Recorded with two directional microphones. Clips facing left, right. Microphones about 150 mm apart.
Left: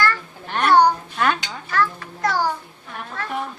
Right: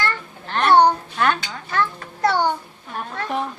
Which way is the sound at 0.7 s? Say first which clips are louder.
Right 1 dB; 25° right (ahead or behind).